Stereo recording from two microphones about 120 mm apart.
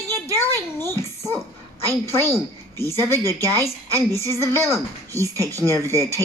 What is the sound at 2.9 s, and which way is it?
A woman's voice, 20° left (ahead or behind).